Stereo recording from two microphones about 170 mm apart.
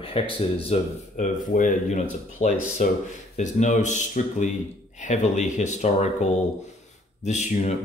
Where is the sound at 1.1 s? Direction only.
50° left (ahead or behind).